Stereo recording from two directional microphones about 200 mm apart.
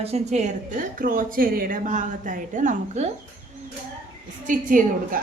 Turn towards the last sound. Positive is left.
turn(degrees=-40)  # may be behind; listen again after turning